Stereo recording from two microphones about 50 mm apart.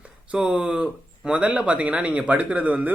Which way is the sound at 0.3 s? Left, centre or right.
Right.